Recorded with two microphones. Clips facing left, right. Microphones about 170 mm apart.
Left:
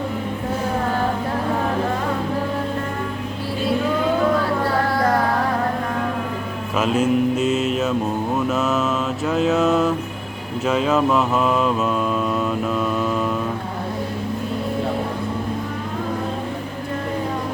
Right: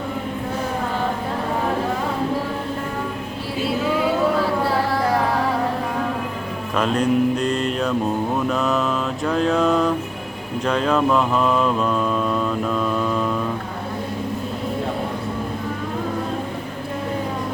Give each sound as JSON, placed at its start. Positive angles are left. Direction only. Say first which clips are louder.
{"t": 6.7, "sound": "music", "louder": "even", "side_deg": 5}
{"t": 8.4, "sound": "mantra", "louder": "left 3 dB", "side_deg": 5}